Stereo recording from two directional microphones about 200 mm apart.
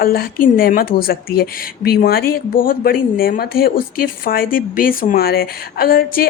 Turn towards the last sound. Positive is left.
turn(degrees=45)  # may be behind; listen again after turning